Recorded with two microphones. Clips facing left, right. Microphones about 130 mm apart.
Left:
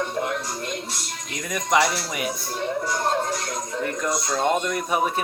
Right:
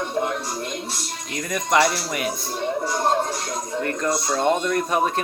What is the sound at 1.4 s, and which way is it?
Speech, centre (ahead or behind).